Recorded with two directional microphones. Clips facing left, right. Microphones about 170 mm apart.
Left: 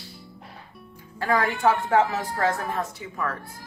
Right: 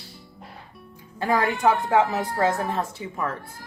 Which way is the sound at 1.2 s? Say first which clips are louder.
Right 1 dB; 20° right (ahead or behind).